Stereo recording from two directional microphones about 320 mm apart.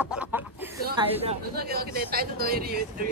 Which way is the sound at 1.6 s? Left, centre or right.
Right.